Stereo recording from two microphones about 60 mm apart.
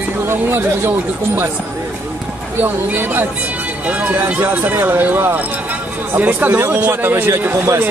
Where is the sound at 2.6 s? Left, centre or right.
Right.